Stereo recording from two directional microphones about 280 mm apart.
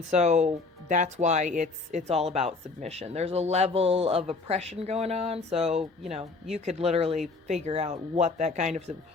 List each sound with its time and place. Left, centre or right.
0.1 s speech: right